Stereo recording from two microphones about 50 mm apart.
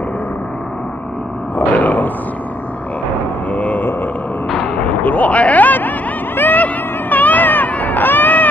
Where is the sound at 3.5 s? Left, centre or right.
Left.